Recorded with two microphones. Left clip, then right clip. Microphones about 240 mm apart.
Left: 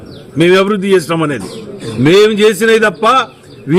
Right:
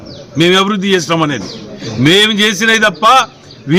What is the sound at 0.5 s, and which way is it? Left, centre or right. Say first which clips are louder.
Speech: left 3 dB; centre.